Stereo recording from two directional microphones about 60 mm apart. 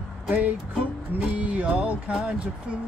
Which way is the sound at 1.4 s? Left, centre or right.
Right.